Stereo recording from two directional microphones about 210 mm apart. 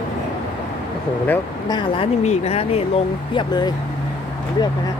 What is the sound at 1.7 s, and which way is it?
A woman's voice, 25° left (ahead or behind).